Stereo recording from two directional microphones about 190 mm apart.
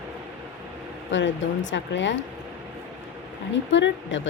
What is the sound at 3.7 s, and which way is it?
Speech, 75° left (ahead or behind).